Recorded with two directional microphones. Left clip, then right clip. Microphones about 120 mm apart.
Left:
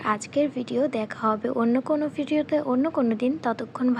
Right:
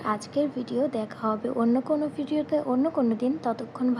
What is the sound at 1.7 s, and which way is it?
Speech, 70° left (ahead or behind).